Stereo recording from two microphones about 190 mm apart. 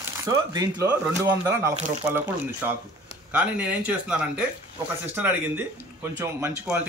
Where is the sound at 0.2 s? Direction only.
15° right (ahead or behind).